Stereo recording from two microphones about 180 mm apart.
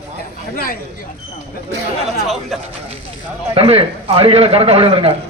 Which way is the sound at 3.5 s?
30° right (ahead or behind).